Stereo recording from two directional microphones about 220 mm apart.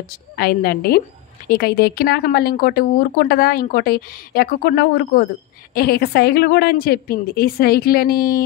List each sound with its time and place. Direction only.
0.4 s speech: 40° left (ahead or behind)